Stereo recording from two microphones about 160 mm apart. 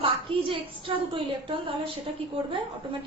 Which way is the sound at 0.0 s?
35° right (ahead or behind).